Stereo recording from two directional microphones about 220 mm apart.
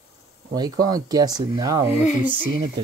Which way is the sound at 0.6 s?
15° right (ahead or behind).